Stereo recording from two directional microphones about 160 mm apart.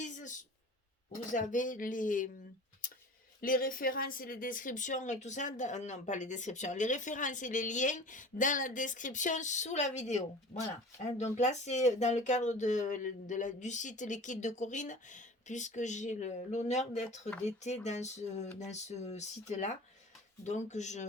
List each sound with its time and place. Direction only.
0.0 s a sound: 50° left (ahead or behind)
1.3 s speech: 55° left (ahead or behind)
2.8 s tick-tock: 60° left (ahead or behind)
3.4 s speech: 60° left (ahead or behind)